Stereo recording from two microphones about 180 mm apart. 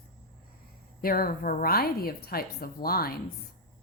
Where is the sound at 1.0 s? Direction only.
55° left (ahead or behind).